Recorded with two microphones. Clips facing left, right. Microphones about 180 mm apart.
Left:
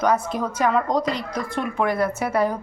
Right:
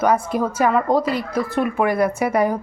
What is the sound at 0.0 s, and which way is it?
A woman's voice, 10° right (ahead or behind).